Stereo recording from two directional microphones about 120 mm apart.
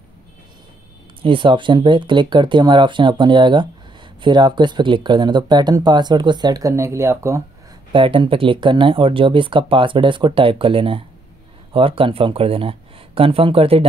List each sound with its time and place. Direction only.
1.2 s speech: 45° right (ahead or behind); by 7.4 s 25° right (ahead or behind)
7.9 s speech: 45° right (ahead or behind)